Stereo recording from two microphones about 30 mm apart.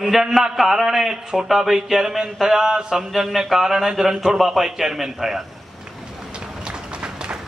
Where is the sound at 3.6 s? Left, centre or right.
Centre.